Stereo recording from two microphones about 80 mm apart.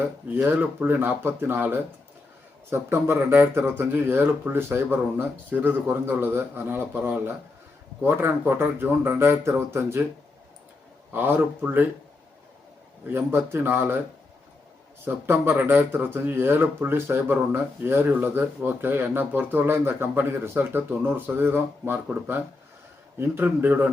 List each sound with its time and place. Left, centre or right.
0.6 s speech: right
11.1 s a man's voice: right
13.1 s speech: right
15.0 s speech: right